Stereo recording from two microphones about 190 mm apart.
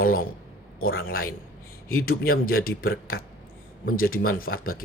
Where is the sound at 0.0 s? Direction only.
50° left (ahead or behind).